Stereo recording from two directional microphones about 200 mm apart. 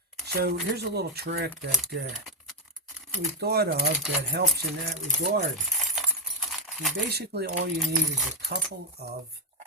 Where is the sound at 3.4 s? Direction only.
55° right (ahead or behind).